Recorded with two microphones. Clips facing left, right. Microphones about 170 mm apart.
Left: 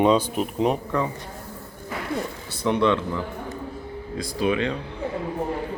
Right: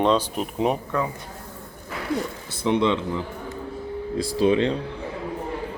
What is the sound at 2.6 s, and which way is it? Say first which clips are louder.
Speech: even; 20° right (ahead or behind).